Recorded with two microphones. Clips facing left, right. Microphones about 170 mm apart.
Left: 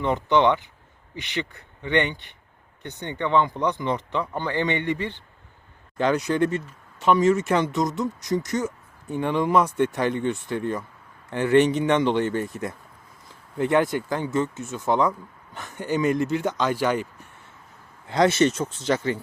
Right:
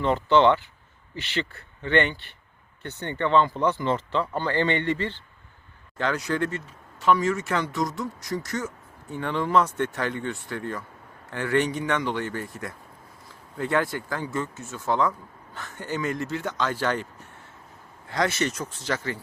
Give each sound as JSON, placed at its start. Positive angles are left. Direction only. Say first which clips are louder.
{"t": 0.0, "sound": "speech", "louder": "right 1 dB", "side_deg": 15}
{"t": 18.1, "sound": "speech", "louder": "left 7 dB", "side_deg": 25}